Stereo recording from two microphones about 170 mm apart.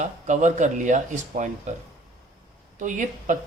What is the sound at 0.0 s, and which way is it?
Speech, 45° right (ahead or behind).